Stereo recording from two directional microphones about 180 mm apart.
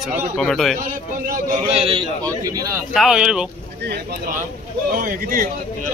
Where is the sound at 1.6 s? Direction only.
30° right (ahead or behind).